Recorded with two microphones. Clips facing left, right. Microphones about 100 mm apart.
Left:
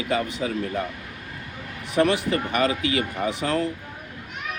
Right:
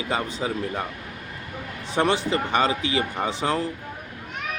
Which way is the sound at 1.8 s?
30° right (ahead or behind).